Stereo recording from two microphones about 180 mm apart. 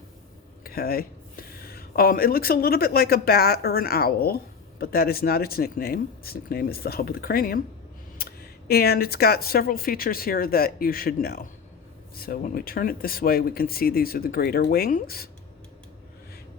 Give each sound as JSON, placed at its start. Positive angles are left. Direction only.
{"t": 0.6, "sound": "speech", "side_deg": 55}